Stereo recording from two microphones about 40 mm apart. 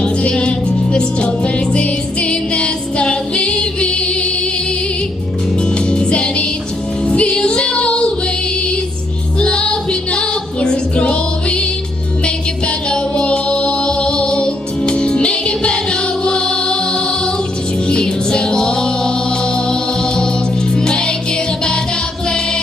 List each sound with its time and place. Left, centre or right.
0.0 s music: left
5.6 s music: left
7.4 s child singing: left
9.4 s music: left